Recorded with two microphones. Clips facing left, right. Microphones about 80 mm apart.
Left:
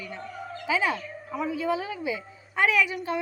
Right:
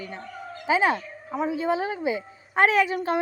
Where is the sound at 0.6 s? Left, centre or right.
Right.